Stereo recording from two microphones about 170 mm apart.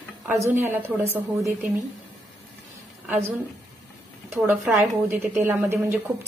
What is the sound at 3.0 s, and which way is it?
A woman's voice, 10° right (ahead or behind).